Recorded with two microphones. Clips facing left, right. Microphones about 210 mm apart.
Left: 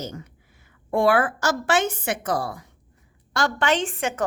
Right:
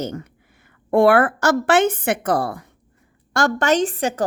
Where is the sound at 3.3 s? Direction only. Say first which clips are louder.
Right 5 dB; 45° right (ahead or behind).